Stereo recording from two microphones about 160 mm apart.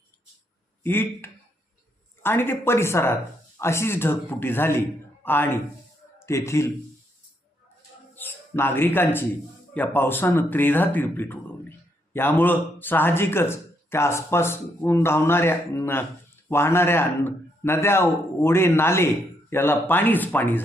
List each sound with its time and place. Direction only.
0.8 s speech: 15° left (ahead or behind)
8.1 s a man's voice: 15° left (ahead or behind)